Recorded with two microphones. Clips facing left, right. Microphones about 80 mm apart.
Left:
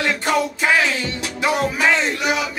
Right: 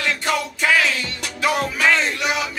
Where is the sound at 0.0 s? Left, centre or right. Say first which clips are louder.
Left 3 dB; left.